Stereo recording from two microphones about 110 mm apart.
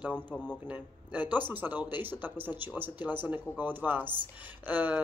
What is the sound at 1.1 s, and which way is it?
Speech, 15° right (ahead or behind).